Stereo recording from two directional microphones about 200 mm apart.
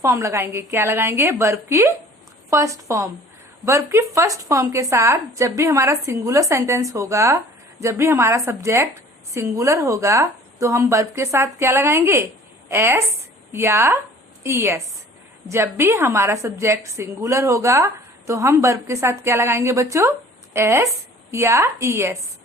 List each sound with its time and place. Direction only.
0.0 s a woman's voice: 15° right (ahead or behind)